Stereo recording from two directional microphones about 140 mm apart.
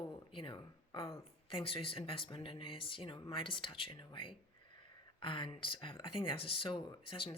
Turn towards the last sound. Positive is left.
turn(degrees=40)  # may be behind; listen again after turning